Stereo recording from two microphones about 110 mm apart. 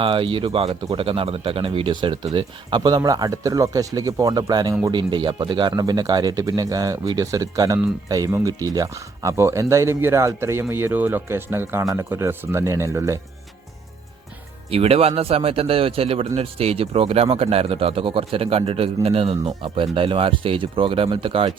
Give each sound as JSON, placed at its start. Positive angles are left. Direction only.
{"t": 0.0, "sound": "speech", "side_deg": -50}
{"t": 14.7, "sound": "a man's voice", "side_deg": -60}